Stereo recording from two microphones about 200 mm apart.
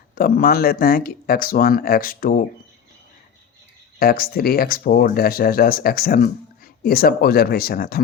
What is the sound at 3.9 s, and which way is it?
Speech, 50° left (ahead or behind).